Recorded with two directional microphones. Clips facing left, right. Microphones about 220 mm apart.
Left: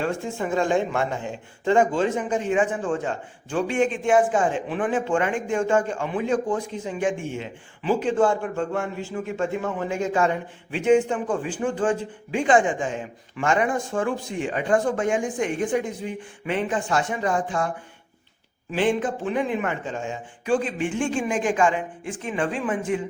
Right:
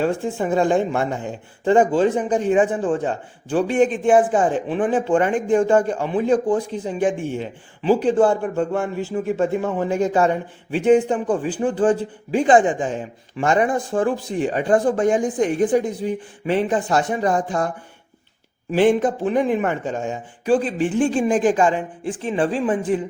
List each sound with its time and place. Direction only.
0.0 s speech: 35° right (ahead or behind)
18.7 s speech: 40° right (ahead or behind)